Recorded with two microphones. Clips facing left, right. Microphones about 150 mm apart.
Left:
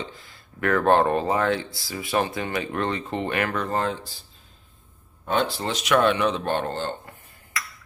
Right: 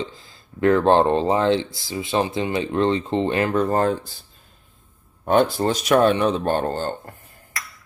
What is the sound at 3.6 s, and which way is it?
Speech, 45° right (ahead or behind).